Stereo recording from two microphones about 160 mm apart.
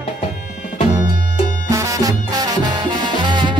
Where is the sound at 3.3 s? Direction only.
30° right (ahead or behind).